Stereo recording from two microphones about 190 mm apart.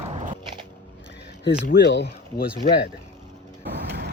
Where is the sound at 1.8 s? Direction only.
65° left (ahead or behind).